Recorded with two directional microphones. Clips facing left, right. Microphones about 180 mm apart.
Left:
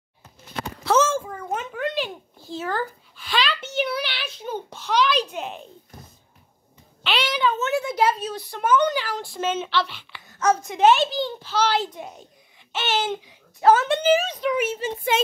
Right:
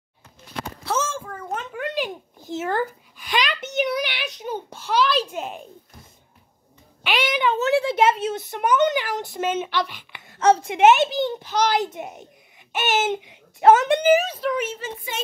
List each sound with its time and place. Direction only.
0.8 s a sound: 75° left (ahead or behind)
1.2 s a sound: 10° left (ahead or behind)
1.7 s a child's voice: 10° right (ahead or behind)
7.0 s speech: 15° right (ahead or behind)
7.5 s a child's voice: 30° right (ahead or behind); by 10.2 s 15° right (ahead or behind)
10.3 s a child's voice: 30° right (ahead or behind); by 14.5 s 10° right (ahead or behind)
14.5 s speech: 10° left (ahead or behind)
15.1 s speech: 90° left